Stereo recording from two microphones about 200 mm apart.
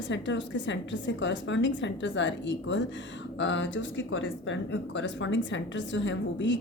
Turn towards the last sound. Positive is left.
turn(degrees=65)  # may be behind; listen again after turning